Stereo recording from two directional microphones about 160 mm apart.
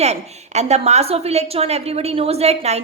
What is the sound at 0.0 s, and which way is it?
A woman's voice, 45° right (ahead or behind).